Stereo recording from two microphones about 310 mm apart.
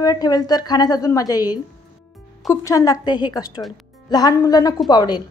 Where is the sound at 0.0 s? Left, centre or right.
Centre.